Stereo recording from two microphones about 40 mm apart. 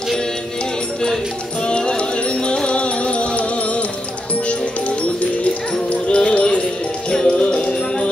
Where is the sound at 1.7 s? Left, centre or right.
Left.